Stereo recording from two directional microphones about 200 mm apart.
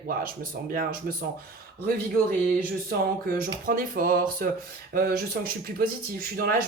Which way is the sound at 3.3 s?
45° right (ahead or behind).